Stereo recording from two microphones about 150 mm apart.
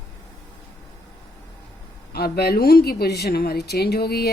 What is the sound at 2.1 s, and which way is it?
A woman's voice, 90° left.